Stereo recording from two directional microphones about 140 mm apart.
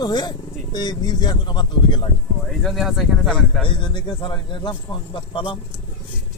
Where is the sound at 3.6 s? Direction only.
35° left (ahead or behind).